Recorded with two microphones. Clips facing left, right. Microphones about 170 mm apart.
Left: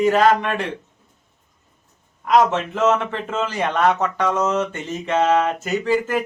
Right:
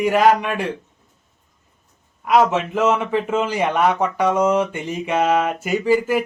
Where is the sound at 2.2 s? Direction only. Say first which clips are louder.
Even; 10° right (ahead or behind).